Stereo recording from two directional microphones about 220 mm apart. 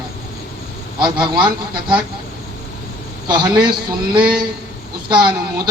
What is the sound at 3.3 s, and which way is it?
A man's voice, 20° right (ahead or behind).